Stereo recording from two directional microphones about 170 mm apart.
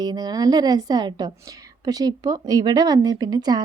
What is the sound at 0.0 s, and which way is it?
A woman's voice, 25° right (ahead or behind).